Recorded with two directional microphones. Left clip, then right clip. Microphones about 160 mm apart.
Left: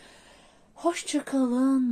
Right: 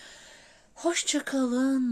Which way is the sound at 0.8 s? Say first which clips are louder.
Even; 35° right (ahead or behind).